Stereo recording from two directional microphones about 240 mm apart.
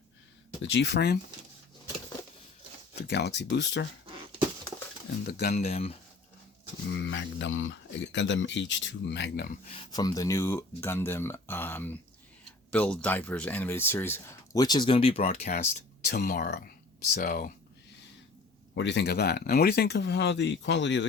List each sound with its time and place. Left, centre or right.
0.6 s speech: left
3.1 s speech: left
5.4 s speech: left
6.9 s speech: left
9.7 s speech: centre; by 17.5 s left
18.7 s speech: left